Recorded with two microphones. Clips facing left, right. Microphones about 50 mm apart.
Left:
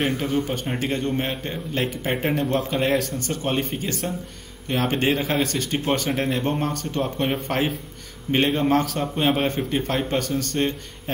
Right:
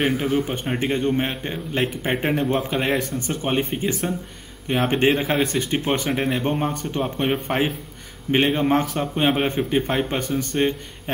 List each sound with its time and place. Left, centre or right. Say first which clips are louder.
0.2 s a man's voice: right 2 dB; centre
9.1 s a man's voice: right 1 dB; centre